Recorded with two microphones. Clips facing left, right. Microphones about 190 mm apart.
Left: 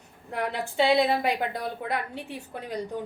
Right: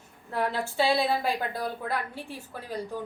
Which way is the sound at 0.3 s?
15° left (ahead or behind).